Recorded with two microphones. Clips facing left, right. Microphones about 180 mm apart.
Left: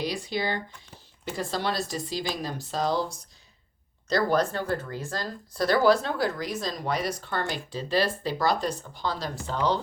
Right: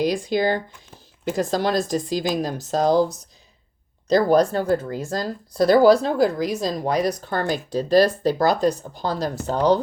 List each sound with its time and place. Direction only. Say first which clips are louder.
0.0 s speech: right 9 dB; 45° right (ahead or behind)
4.3 s speech: right 8 dB; 40° right (ahead or behind)